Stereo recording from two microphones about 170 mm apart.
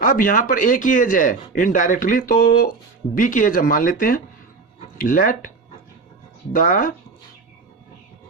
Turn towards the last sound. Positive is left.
turn(degrees=50)  # may be behind; listen again after turning